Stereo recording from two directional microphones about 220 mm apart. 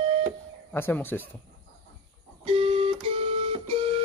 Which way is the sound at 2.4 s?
25° right (ahead or behind).